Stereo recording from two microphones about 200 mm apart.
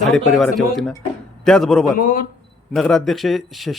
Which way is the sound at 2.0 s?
40° left (ahead or behind).